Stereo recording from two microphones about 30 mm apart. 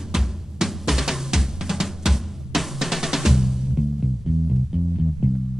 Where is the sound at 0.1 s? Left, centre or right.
Centre.